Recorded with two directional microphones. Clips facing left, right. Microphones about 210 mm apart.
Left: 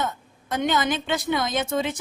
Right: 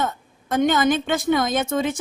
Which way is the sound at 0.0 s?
50° right (ahead or behind).